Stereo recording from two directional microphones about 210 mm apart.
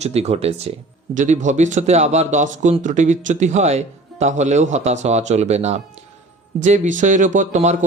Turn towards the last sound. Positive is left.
turn(degrees=-35)  # may be behind; listen again after turning